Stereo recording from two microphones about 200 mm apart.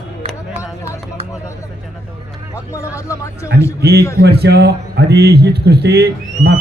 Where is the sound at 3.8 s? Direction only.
55° right (ahead or behind).